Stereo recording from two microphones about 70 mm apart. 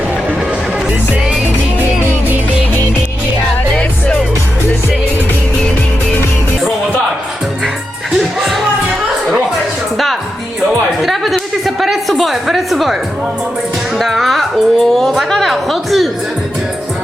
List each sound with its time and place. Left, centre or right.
1.8 s music: right
3.8 s music: centre
8.2 s music: centre
11.0 s a woman's voice: centre